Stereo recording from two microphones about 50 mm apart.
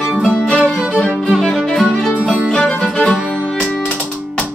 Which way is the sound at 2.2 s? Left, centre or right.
Right.